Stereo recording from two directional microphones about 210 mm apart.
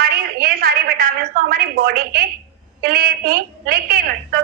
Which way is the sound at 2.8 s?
45° right (ahead or behind).